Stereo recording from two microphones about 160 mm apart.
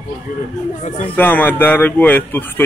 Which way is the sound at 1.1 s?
10° left (ahead or behind).